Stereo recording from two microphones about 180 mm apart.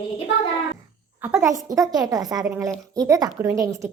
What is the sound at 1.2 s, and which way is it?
A woman's voice, 15° right (ahead or behind).